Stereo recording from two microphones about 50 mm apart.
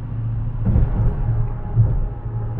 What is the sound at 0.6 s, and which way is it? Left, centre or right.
Vehicle, centre.